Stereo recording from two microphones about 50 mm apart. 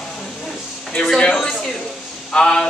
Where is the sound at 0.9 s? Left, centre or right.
Centre.